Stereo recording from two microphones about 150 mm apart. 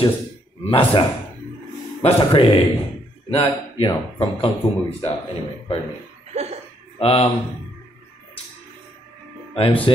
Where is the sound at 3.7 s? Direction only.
40° left (ahead or behind).